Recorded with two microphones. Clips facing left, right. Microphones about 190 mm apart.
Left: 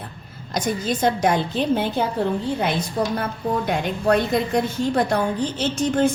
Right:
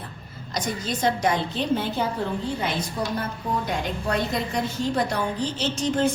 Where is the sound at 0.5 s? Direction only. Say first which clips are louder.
Left 5 dB; 50° left (ahead or behind).